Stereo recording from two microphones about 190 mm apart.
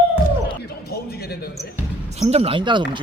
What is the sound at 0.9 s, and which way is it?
Basketball bounce, 55° left (ahead or behind).